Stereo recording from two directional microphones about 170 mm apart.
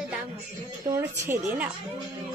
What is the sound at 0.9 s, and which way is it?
Speech, 15° right (ahead or behind).